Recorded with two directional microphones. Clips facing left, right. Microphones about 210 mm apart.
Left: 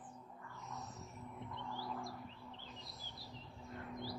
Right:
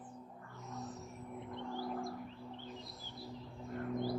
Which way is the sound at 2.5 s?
55° right (ahead or behind).